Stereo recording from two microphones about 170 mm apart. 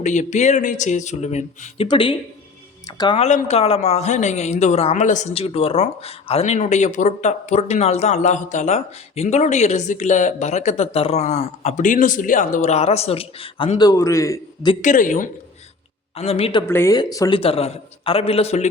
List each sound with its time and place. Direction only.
0.0 s speech: 45° left (ahead or behind)
1.9 s speech: 30° left (ahead or behind)
3.2 s speech: 45° left (ahead or behind); by 14.7 s 20° left (ahead or behind)
14.8 s speech: 50° left (ahead or behind)
16.1 s a man's voice: 35° left (ahead or behind)
16.6 s a man's voice: 15° left (ahead or behind); by 18.7 s 40° left (ahead or behind)